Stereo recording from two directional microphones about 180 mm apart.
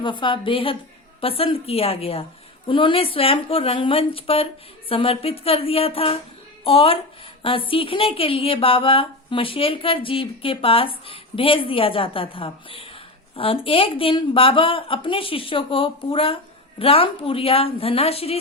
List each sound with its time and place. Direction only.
0.0 s a woman's voice: 25° left (ahead or behind)